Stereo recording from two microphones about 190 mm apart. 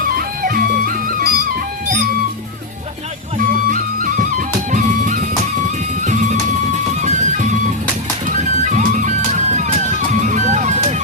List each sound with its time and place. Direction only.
0.4 s music: 50° right (ahead or behind)
3.3 s music: 45° right (ahead or behind)
7.0 s music: 40° right (ahead or behind)